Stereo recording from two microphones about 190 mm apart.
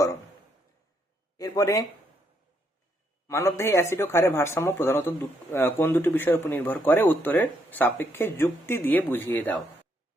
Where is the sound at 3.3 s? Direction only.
15° left (ahead or behind).